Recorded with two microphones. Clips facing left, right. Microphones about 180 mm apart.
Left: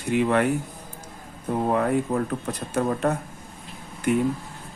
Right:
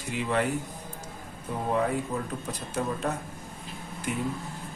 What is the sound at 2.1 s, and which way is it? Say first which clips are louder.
Speech: left 7 dB; 70° left (ahead or behind).